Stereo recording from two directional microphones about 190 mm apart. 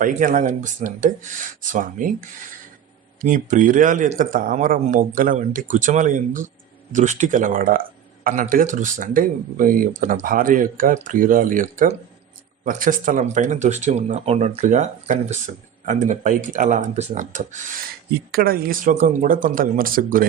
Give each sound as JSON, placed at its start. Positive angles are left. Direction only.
{"t": 0.0, "sound": "speech", "side_deg": -45}
{"t": 3.2, "sound": "speech", "side_deg": -45}
{"t": 18.3, "sound": "speech", "side_deg": -50}